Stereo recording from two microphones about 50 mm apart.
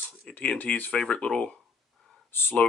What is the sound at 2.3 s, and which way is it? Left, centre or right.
Speech, left.